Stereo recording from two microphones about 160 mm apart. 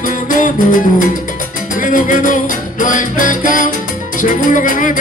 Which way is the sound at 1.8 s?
55° left (ahead or behind).